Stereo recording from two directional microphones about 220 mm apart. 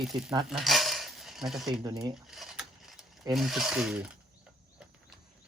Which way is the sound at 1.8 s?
15° right (ahead or behind).